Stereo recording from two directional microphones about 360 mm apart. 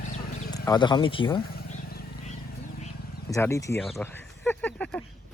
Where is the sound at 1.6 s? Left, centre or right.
Left.